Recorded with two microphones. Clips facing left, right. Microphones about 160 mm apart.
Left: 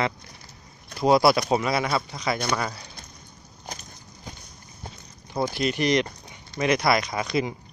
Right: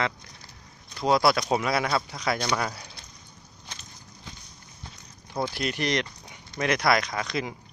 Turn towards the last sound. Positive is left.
turn(degrees=5)  # may be behind; listen again after turning